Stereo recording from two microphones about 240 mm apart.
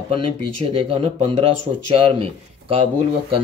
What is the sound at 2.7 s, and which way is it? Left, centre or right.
Speech, right.